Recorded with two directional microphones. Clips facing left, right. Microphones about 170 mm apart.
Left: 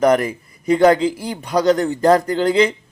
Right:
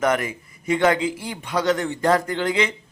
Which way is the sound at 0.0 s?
35° left (ahead or behind).